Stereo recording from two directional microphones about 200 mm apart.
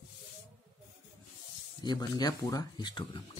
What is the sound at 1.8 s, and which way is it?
Speech, 20° left (ahead or behind).